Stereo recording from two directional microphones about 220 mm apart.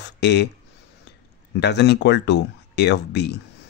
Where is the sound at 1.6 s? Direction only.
50° left (ahead or behind).